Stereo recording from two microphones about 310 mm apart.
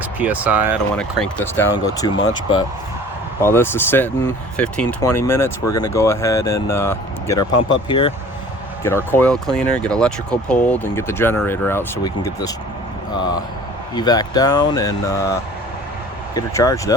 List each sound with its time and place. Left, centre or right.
0.2 s speech: centre
2.0 s speech: centre
3.4 s speech: centre
13.9 s speech: centre